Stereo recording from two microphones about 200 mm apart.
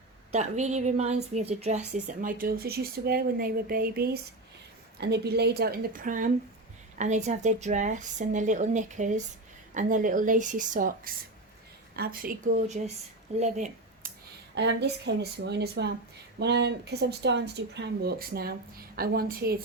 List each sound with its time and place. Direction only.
0.3 s a woman's voice: 35° right (ahead or behind)
14.5 s a woman's voice: 60° right (ahead or behind)